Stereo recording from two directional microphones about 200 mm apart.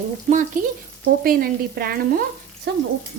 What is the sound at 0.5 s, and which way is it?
A woman's voice, 40° right (ahead or behind).